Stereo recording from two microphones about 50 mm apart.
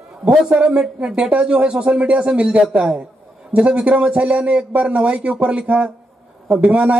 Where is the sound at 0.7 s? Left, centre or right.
Right.